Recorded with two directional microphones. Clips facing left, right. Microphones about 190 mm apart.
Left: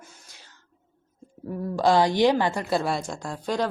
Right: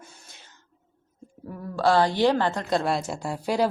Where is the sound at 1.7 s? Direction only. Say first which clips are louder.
Left 1 dB; 15° left (ahead or behind); by 3.7 s 10° right (ahead or behind).